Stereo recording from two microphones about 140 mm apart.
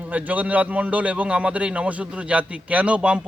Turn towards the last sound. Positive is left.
turn(degrees=-10)  # may be behind; listen again after turning